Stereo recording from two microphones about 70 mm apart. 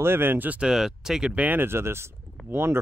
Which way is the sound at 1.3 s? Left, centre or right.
Right.